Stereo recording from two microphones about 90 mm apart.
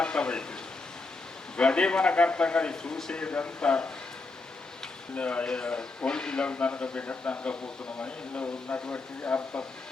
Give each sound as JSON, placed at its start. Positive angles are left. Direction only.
{"t": 0.0, "sound": "speech", "side_deg": 10}
{"t": 1.5, "sound": "speech", "side_deg": 10}
{"t": 5.1, "sound": "speech", "side_deg": 15}